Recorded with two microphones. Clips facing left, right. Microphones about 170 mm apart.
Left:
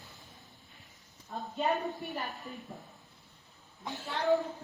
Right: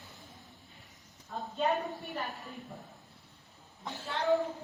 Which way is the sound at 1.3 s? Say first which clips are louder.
Even; 15° left (ahead or behind).